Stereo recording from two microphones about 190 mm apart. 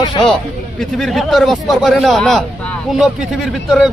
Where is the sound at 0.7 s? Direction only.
Centre (ahead or behind).